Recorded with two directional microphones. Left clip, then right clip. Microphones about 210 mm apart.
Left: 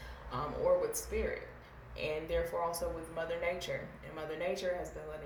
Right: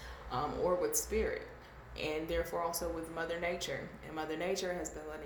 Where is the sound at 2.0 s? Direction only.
30° right (ahead or behind).